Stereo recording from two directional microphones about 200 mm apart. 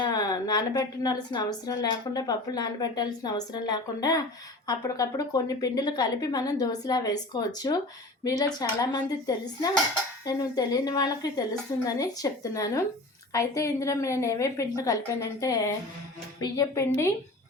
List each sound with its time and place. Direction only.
0.0 s a woman's voice: 20° left (ahead or behind)